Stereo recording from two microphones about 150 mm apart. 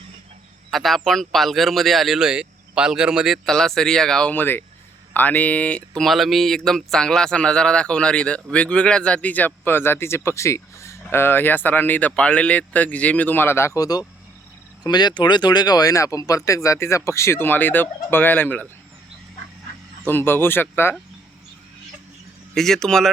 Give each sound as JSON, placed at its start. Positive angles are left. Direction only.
{"t": 0.7, "sound": "speech", "side_deg": 0}
{"t": 20.1, "sound": "speech", "side_deg": 15}
{"t": 22.5, "sound": "speech", "side_deg": 5}